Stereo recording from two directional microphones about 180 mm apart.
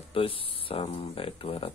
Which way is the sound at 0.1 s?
30° left (ahead or behind).